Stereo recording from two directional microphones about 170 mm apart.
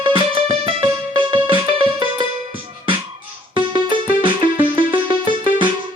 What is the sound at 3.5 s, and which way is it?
Keyboard, 30° right (ahead or behind).